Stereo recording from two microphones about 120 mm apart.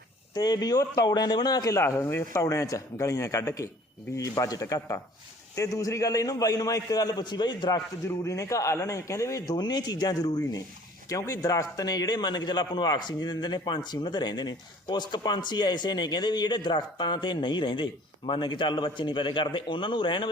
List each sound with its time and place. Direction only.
0.3 s a man's voice: 35° left (ahead or behind)
8.0 s a man's voice: 25° left (ahead or behind); by 20.3 s 40° left (ahead or behind)